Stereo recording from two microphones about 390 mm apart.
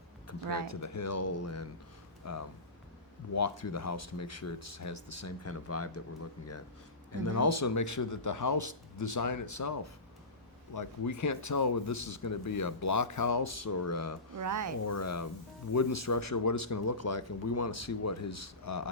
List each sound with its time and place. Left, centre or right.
0.3 s speech: left
7.1 s speech: left
10.8 s speech: left
14.3 s speech: right
14.8 s speech: left